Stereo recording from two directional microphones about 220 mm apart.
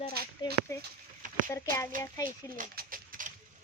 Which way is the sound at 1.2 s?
35° right (ahead or behind).